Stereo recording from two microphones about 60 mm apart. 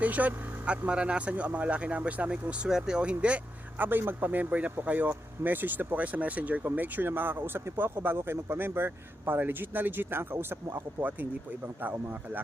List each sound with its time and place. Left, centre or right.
0.0 s speech: right
2.6 s speech: centre
3.8 s speech: right
11.8 s speech: right